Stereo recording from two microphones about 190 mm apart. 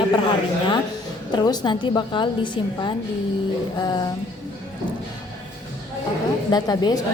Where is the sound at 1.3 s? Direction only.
20° left (ahead or behind).